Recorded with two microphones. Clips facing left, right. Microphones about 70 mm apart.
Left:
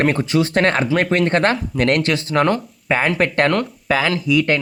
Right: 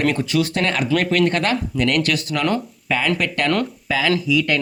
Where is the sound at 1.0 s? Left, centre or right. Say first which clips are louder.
Left 2 dB; left.